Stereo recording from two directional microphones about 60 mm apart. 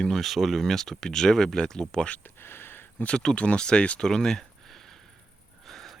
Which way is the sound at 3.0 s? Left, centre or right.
Centre.